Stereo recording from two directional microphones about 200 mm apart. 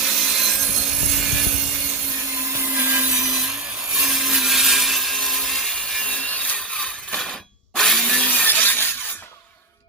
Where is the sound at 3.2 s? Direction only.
5° right (ahead or behind).